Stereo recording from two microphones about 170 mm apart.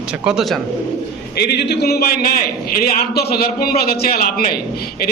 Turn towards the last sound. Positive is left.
turn(degrees=60)  # may be behind; listen again after turning